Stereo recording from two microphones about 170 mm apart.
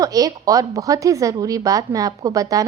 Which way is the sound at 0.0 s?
20° right (ahead or behind).